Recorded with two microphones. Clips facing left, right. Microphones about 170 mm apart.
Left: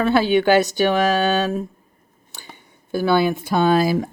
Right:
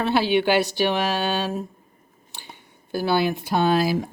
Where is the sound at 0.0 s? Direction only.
45° left (ahead or behind).